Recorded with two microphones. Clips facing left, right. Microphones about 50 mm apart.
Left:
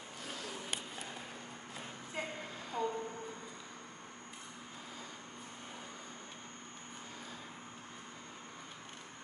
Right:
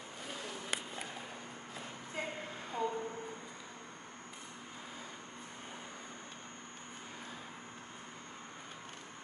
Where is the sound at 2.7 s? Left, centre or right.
Centre.